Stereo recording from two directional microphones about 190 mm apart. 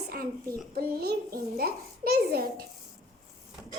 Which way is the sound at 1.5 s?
55° right (ahead or behind).